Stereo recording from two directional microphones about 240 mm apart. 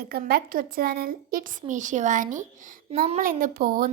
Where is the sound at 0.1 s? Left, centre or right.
Right.